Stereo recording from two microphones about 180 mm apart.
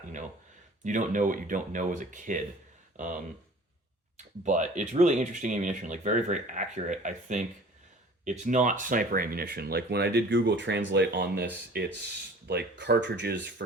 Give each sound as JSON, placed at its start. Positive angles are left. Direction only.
{"t": 0.9, "sound": "speech", "side_deg": -45}
{"t": 4.4, "sound": "speech", "side_deg": -40}
{"t": 11.7, "sound": "speech", "side_deg": -60}
{"t": 12.5, "sound": "speech", "side_deg": -70}